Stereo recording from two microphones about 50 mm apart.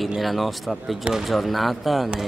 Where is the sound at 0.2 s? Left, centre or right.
Centre.